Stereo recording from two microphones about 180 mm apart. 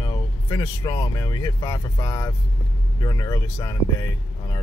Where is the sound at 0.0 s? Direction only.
20° left (ahead or behind).